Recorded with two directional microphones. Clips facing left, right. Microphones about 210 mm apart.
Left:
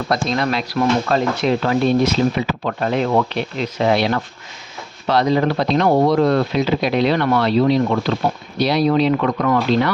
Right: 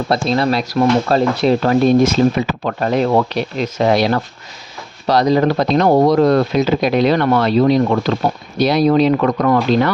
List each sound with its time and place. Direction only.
0.1 s speech: 30° right (ahead or behind)